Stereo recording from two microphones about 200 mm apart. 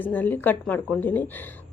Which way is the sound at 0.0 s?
10° left (ahead or behind).